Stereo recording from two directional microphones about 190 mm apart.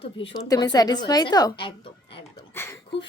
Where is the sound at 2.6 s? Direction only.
15° left (ahead or behind).